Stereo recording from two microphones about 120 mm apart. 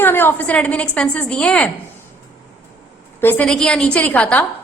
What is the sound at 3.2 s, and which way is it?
A woman's voice, 15° left (ahead or behind).